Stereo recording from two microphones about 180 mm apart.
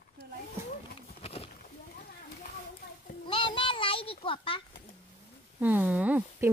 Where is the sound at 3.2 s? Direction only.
30° left (ahead or behind).